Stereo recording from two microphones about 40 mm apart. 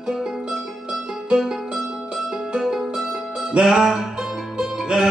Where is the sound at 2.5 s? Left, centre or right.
Centre.